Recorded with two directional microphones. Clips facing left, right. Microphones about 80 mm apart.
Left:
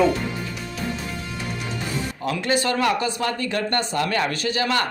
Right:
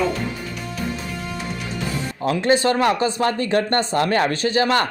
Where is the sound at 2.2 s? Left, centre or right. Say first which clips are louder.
Right 5 dB; right.